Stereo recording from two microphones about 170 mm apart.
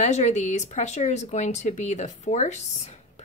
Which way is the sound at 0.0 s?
40° left (ahead or behind).